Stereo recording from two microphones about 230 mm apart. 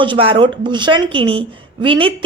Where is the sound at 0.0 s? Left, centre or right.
Right.